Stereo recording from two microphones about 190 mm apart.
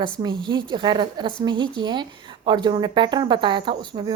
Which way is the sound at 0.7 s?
25° right (ahead or behind).